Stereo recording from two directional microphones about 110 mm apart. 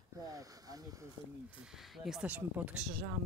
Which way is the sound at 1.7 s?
5° right (ahead or behind).